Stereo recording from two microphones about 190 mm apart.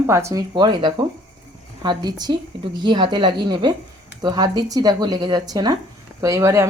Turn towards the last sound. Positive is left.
turn(degrees=-15)  # may be behind; listen again after turning